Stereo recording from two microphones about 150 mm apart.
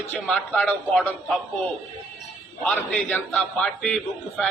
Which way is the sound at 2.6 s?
5° left (ahead or behind).